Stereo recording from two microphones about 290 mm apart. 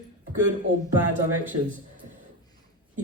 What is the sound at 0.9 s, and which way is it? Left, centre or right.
Speech, centre.